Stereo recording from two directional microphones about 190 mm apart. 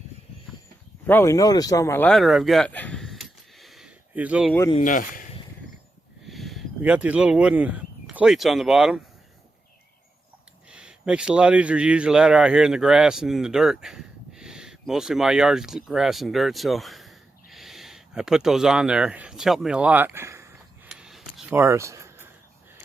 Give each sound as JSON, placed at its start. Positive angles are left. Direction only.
{"t": 1.0, "sound": "speech", "side_deg": 10}
{"t": 4.8, "sound": "speech", "side_deg": 45}
{"t": 6.2, "sound": "speech", "side_deg": 0}
{"t": 10.7, "sound": "speech", "side_deg": -5}
{"t": 21.0, "sound": "a sound", "side_deg": 0}
{"t": 21.6, "sound": "a sound", "side_deg": -15}